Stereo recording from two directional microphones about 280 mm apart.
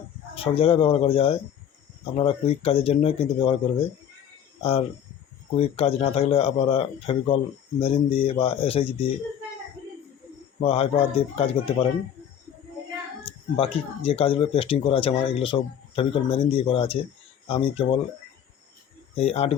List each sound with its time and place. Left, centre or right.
0.3 s speech: centre
10.6 s speech: left
13.6 s speech: centre
19.1 s speech: left